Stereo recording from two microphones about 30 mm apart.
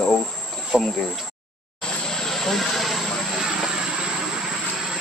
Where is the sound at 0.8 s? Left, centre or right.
Centre.